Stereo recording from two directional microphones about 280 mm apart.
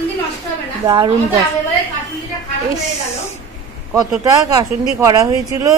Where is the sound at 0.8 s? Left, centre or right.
Centre.